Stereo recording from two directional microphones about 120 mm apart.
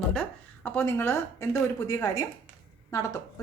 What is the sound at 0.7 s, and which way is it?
A woman's voice, 20° left (ahead or behind).